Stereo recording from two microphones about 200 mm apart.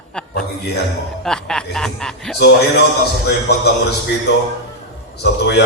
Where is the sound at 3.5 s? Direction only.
55° left (ahead or behind).